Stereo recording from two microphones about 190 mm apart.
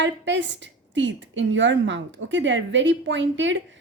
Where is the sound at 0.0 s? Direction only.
70° right (ahead or behind).